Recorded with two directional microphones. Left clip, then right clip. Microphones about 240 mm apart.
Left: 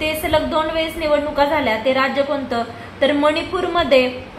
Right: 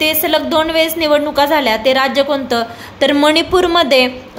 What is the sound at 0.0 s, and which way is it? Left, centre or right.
A woman's voice, right.